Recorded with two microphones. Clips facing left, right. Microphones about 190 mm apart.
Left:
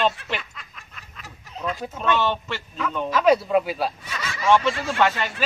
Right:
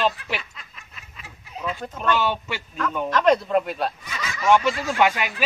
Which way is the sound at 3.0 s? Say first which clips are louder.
Left 1 dB; 5° left (ahead or behind).